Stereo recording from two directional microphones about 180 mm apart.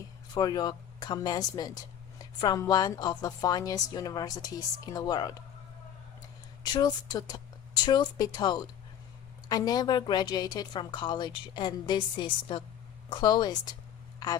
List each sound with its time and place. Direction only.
0.3 s a woman's voice: 20° left (ahead or behind)
6.6 s a woman's voice: 20° left (ahead or behind)